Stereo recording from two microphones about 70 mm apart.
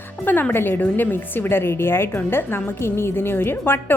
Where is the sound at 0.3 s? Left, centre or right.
Left.